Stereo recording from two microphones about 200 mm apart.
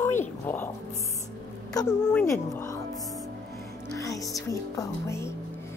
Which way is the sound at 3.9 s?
15° left (ahead or behind).